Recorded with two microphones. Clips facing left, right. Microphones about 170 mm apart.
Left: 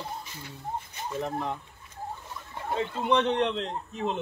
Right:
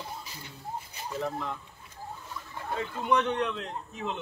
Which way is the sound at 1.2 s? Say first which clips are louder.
Left 2 dB; 20° left (ahead or behind).